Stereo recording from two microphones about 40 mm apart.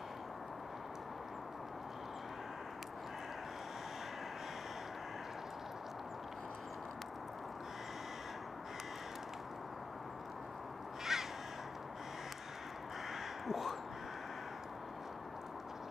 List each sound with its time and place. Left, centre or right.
11.1 s crow: centre
13.1 s crow: centre